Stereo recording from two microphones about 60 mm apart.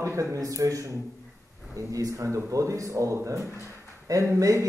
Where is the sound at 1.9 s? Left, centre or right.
Right.